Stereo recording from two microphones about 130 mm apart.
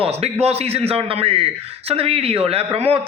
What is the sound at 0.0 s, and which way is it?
A man's voice, 50° right (ahead or behind).